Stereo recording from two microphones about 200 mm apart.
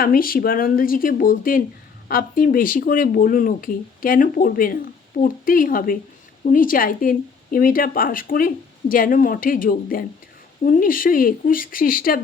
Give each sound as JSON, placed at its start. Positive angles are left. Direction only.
{"t": 0.0, "sound": "speech", "side_deg": 45}